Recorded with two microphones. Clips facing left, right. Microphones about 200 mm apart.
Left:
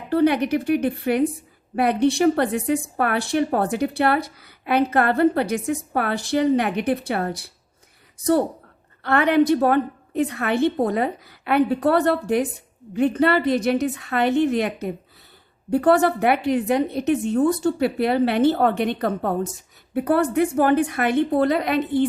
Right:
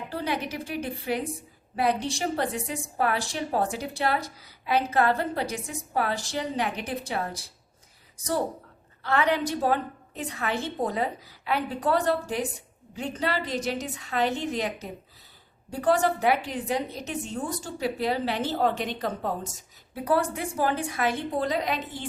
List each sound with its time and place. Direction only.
0.1 s speech: 60° left (ahead or behind)
9.0 s speech: 60° left (ahead or behind)